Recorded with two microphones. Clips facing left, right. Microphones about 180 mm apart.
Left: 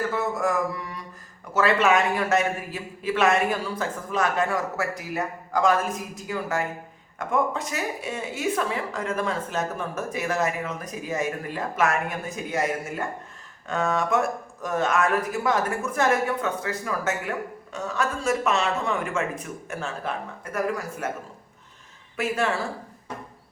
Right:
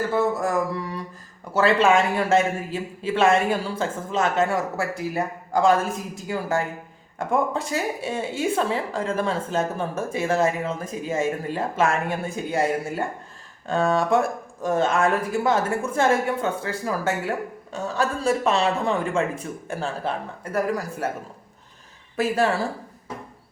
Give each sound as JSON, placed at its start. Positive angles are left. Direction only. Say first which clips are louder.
{"t": 0.1, "sound": "music", "louder": "right 3 dB", "side_deg": -35}
{"t": 1.5, "sound": "speech", "louder": "right 3 dB", "side_deg": -30}
{"t": 22.1, "sound": "speech", "louder": "right 4 dB", "side_deg": -35}